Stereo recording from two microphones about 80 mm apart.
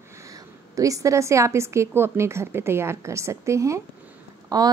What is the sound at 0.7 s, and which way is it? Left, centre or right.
A woman's voice, right.